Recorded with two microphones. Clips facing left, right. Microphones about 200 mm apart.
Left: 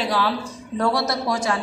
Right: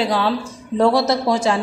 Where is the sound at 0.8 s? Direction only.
25° right (ahead or behind).